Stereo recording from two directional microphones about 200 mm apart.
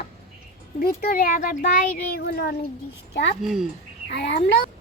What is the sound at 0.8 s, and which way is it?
Speech, 50° left (ahead or behind).